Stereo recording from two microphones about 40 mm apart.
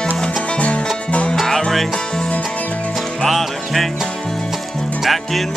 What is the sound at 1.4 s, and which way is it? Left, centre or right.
Music, centre.